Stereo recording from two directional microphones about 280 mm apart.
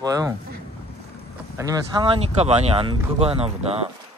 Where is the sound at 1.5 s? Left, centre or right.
Centre.